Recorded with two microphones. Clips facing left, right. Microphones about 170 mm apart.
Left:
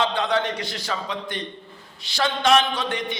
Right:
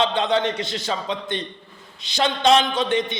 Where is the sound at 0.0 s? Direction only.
20° right (ahead or behind).